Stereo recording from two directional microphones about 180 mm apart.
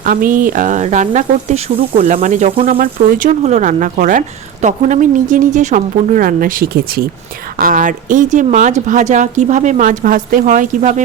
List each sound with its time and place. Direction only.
0.0 s speech: 50° right (ahead or behind)